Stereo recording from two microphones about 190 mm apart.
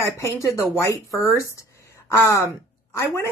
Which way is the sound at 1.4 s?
15° left (ahead or behind).